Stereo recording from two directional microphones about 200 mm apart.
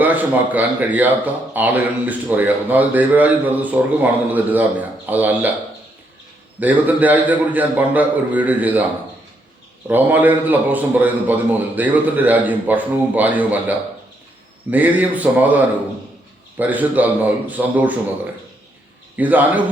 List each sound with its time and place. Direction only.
0.0 s speech: 10° right (ahead or behind)
6.6 s speech: 10° right (ahead or behind)
9.8 s speech: 10° right (ahead or behind)
19.1 s speech: 10° right (ahead or behind)